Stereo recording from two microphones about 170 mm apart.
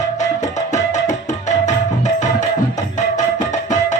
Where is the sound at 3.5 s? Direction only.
45° left (ahead or behind).